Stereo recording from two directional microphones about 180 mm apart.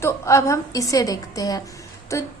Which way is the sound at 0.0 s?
15° left (ahead or behind).